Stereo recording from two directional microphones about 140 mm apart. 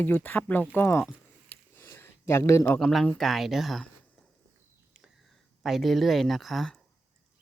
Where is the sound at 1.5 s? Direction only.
15° left (ahead or behind).